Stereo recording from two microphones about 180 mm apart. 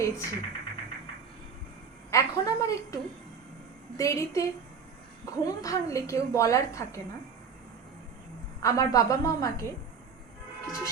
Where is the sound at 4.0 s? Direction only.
15° left (ahead or behind).